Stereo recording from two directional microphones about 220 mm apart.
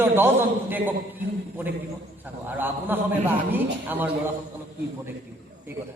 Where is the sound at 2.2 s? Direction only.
10° right (ahead or behind).